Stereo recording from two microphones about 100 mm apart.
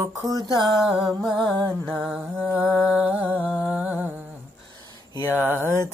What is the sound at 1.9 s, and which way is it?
Mantra, 5° right (ahead or behind).